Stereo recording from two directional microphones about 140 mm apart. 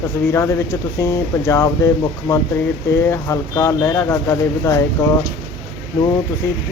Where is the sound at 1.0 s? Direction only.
25° left (ahead or behind).